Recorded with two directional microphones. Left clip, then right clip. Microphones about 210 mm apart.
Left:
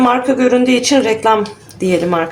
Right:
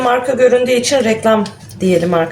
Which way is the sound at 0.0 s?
40° left (ahead or behind).